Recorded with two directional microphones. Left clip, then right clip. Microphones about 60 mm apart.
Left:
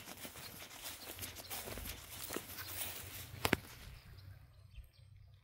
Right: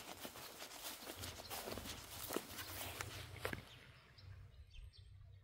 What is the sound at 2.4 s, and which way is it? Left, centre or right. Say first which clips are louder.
Walk: right 2 dB; right.